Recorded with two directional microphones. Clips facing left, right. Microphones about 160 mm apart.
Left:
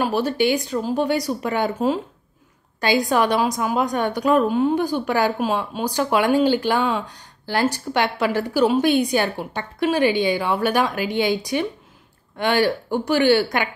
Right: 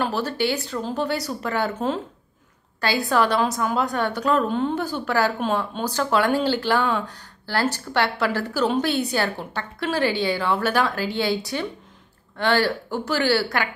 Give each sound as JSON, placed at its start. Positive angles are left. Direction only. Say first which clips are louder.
{"t": 0.0, "sound": "a woman's voice", "louder": "left 4 dB", "side_deg": 15}